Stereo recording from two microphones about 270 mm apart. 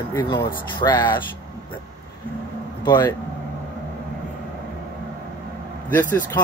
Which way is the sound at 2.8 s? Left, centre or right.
Centre.